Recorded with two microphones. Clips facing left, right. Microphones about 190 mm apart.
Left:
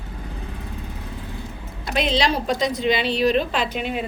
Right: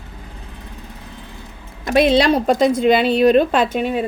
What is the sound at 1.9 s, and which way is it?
Speech, 55° right (ahead or behind).